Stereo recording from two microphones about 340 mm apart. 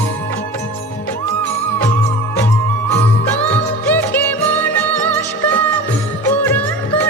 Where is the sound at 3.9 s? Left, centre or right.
Centre.